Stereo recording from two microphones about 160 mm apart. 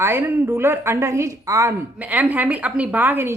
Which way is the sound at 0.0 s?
15° right (ahead or behind).